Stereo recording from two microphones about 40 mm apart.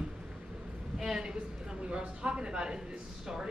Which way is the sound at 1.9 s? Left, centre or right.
Right.